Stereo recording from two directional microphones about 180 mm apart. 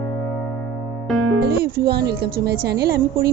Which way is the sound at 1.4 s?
60° right (ahead or behind).